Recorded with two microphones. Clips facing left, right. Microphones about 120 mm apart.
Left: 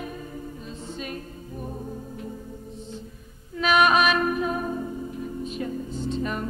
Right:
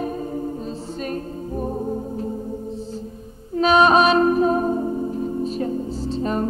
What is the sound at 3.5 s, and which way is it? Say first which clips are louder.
Music: right 5 dB; 30° right (ahead or behind).